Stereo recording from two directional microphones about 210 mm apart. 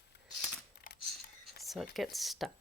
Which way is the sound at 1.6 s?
Centre (ahead or behind).